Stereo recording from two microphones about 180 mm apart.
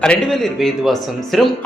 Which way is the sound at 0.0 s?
5° left (ahead or behind).